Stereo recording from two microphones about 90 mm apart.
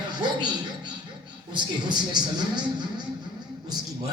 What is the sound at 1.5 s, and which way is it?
Speech, 55° right (ahead or behind).